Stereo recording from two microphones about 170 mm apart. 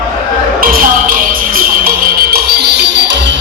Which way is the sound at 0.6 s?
55° right (ahead or behind).